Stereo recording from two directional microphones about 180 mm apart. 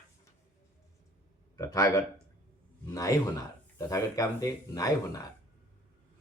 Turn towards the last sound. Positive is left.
turn(degrees=20)  # may be behind; listen again after turning